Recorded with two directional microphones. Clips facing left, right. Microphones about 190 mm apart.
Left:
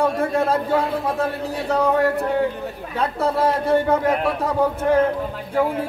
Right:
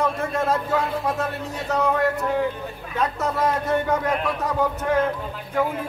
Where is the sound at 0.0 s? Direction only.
30° left (ahead or behind).